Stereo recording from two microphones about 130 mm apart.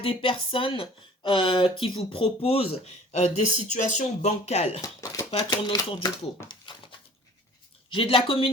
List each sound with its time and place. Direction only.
0.0 s speech: 45° left (ahead or behind)
4.8 s speech: 25° left (ahead or behind)
5.5 s speech: 35° left (ahead or behind)
6.5 s a sound: 35° left (ahead or behind)
7.9 s speech: 45° left (ahead or behind)